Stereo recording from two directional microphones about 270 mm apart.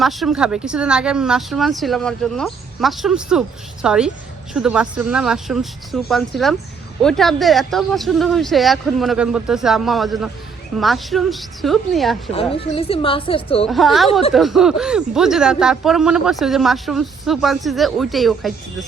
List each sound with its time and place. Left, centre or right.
0.0 s speech: centre
12.3 s a woman's voice: left
13.7 s speech: centre
14.1 s a woman's voice: left
14.3 s speech: centre